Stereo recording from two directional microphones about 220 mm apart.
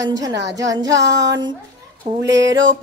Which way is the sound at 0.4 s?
55° right (ahead or behind).